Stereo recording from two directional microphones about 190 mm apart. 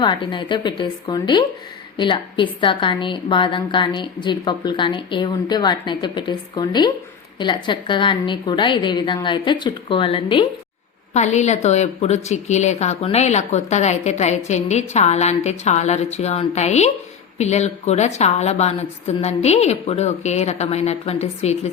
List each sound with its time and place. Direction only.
0.0 s a woman's voice: 25° left (ahead or behind)